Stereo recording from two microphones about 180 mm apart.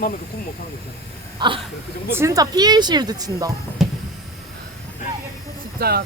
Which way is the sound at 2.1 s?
15° right (ahead or behind).